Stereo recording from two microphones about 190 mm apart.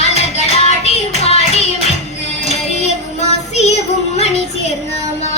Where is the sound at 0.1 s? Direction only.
35° left (ahead or behind).